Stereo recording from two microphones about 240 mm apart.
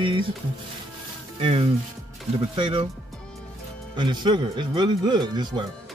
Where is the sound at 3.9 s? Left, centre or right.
Centre.